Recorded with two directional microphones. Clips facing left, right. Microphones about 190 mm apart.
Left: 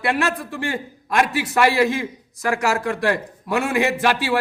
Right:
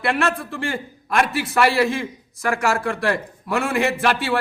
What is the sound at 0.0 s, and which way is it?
A man's voice, 15° left (ahead or behind).